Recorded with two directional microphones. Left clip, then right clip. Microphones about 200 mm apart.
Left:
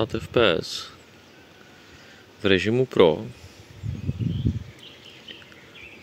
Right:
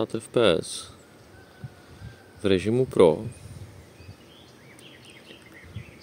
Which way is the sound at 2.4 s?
Centre (ahead or behind).